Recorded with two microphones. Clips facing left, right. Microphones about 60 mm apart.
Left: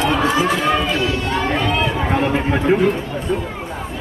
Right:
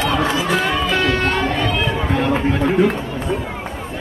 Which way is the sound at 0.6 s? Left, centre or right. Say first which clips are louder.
Left 2 dB; left.